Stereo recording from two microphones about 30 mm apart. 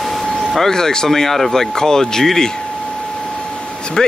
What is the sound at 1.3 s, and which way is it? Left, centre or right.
Speech, centre.